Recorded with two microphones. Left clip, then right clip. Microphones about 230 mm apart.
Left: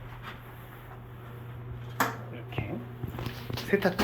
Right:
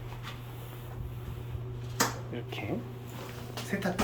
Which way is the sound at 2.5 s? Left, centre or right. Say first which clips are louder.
Left 2 dB; right.